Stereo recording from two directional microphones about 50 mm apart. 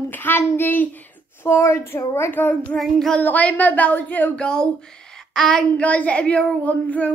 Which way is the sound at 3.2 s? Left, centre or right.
Left.